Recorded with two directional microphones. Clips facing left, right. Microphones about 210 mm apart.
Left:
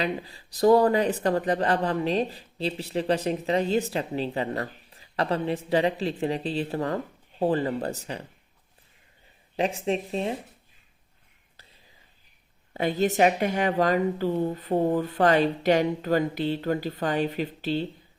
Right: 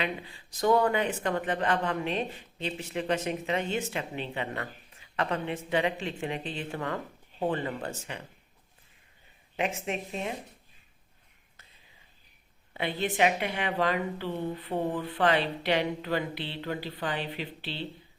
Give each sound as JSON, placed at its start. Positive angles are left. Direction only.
{"t": 0.0, "sound": "speech", "side_deg": 35}
{"t": 9.6, "sound": "speech", "side_deg": 35}
{"t": 12.7, "sound": "speech", "side_deg": 40}